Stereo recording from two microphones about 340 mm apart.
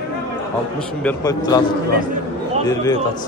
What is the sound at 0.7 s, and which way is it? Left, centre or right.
Speech, centre.